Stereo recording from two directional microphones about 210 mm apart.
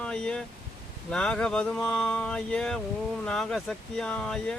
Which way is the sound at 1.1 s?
5° left (ahead or behind).